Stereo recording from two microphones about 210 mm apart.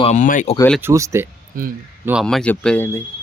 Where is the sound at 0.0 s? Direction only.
35° left (ahead or behind).